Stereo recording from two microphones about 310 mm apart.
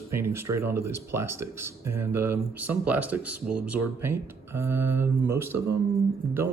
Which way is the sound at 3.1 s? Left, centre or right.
Right.